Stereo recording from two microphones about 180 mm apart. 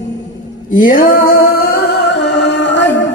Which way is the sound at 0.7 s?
50° left (ahead or behind).